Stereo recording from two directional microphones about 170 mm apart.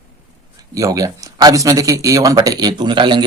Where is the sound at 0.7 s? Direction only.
20° right (ahead or behind).